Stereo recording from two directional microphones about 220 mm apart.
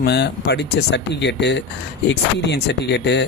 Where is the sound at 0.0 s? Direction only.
50° left (ahead or behind).